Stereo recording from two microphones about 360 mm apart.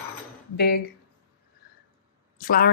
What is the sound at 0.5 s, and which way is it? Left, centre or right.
Speech, left.